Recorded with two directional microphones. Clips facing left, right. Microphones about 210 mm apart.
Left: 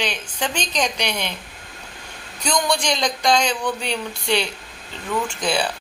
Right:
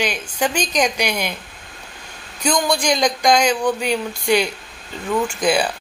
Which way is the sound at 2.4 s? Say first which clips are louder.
Right 3 dB; 5° right (ahead or behind).